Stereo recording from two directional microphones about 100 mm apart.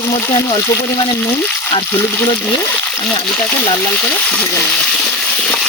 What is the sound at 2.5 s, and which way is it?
Frying, 20° left (ahead or behind).